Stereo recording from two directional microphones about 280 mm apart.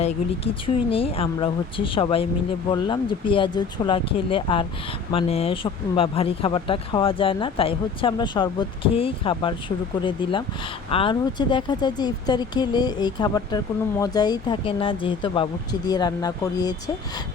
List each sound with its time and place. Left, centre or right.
0.0 s speech: centre